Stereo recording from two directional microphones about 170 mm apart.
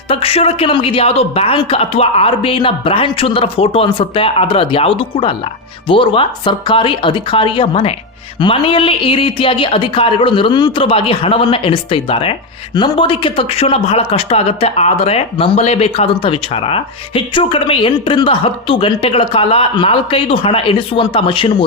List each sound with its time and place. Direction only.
0.1 s speech: 35° left (ahead or behind)